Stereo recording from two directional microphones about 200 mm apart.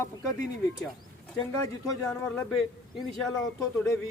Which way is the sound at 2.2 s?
5° left (ahead or behind).